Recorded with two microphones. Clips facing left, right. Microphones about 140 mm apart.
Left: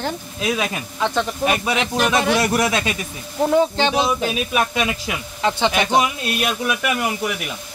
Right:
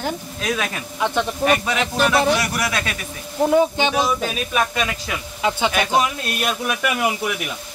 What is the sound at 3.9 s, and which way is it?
Speech, 15° left (ahead or behind).